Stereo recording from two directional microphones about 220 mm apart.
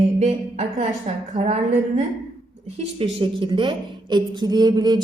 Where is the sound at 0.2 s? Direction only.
30° right (ahead or behind).